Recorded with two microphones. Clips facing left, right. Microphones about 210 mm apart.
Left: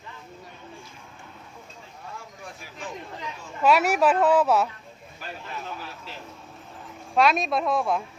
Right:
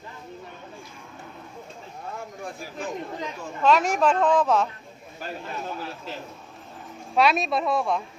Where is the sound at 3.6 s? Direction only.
10° left (ahead or behind).